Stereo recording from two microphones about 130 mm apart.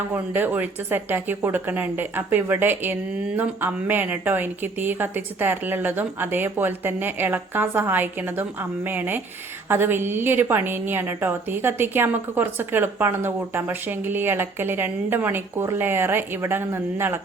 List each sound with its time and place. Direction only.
0.1 s speech: 15° right (ahead or behind)